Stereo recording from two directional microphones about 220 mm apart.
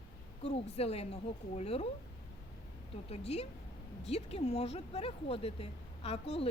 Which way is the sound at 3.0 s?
25° left (ahead or behind).